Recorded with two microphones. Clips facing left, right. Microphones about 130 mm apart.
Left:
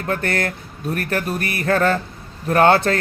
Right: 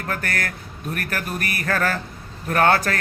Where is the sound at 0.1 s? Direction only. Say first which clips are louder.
Left 6 dB; 25° left (ahead or behind).